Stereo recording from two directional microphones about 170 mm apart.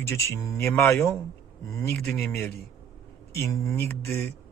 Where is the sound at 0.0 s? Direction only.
15° left (ahead or behind).